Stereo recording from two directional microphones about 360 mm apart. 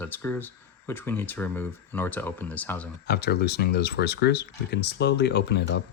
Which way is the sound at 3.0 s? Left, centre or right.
Left.